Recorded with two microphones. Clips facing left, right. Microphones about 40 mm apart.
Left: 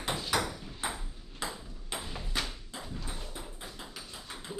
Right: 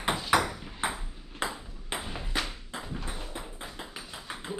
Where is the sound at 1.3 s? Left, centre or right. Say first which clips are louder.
Right 5 dB; right.